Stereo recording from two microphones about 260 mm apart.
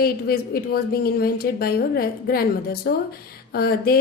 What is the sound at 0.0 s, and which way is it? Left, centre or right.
A woman's voice, left.